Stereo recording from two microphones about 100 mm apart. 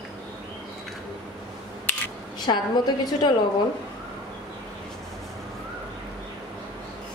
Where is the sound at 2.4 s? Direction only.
45° left (ahead or behind).